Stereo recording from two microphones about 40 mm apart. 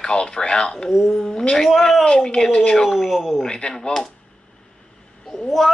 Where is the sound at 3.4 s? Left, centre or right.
Centre.